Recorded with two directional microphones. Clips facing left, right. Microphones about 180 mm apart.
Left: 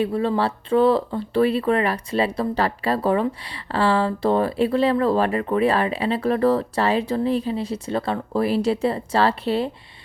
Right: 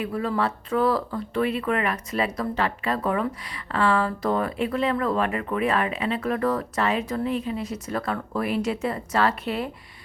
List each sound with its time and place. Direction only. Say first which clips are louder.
0.0 s speech: left 4 dB; 30° left (ahead or behind)